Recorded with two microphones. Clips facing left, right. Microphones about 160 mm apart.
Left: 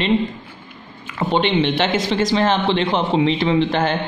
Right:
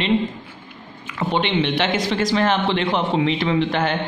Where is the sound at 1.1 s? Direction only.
30° left (ahead or behind).